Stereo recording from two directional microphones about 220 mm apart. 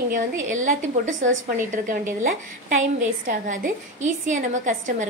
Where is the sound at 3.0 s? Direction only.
35° right (ahead or behind).